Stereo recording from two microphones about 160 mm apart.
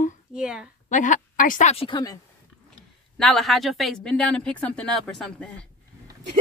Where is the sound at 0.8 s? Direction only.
50° left (ahead or behind); by 2.1 s 30° left (ahead or behind).